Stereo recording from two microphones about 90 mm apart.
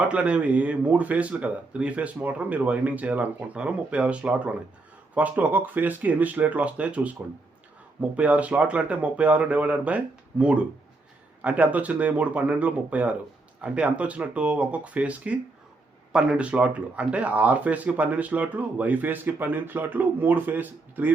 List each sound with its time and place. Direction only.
0.0 s speech: 15° right (ahead or behind)